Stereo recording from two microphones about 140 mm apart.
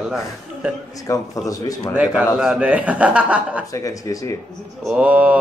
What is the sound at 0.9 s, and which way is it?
Speech, 25° left (ahead or behind).